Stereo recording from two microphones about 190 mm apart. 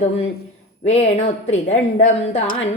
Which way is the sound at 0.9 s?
35° left (ahead or behind).